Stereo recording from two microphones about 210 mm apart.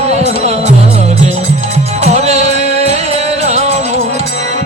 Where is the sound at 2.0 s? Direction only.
30° right (ahead or behind).